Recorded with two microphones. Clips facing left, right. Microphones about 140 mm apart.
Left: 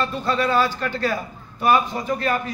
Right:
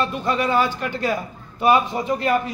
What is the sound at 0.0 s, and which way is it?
A man's voice, 15° right (ahead or behind).